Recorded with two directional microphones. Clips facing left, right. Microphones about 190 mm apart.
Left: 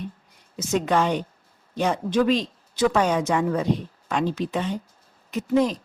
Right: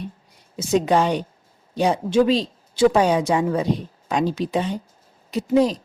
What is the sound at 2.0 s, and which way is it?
Speech, 30° right (ahead or behind).